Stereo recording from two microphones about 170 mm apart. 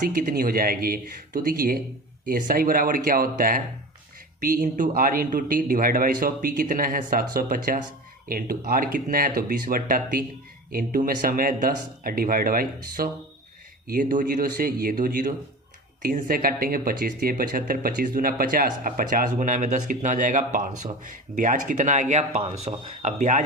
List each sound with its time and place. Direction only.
0.0 s speech: 55° right (ahead or behind)